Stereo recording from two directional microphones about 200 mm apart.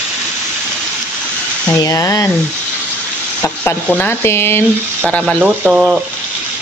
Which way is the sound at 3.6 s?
10° left (ahead or behind).